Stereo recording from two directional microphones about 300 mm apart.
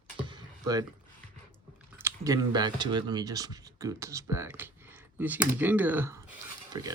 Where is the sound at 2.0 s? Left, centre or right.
Centre.